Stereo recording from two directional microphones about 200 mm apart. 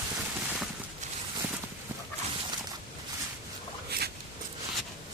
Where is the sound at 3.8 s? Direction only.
50° right (ahead or behind).